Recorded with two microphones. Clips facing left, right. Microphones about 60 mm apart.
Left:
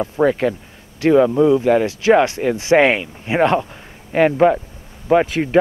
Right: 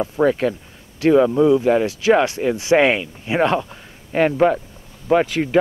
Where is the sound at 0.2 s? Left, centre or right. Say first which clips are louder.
Left 1 dB; centre.